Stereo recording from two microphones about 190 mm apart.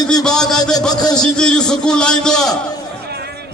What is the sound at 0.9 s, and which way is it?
Speech, 20° left (ahead or behind).